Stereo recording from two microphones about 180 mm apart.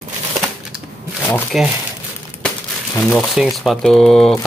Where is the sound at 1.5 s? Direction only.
Centre (ahead or behind).